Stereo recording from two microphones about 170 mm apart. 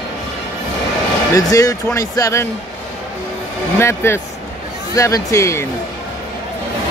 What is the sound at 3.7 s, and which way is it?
Speech, 15° left (ahead or behind).